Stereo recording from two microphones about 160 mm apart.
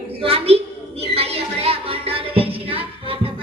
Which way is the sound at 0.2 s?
35° right (ahead or behind).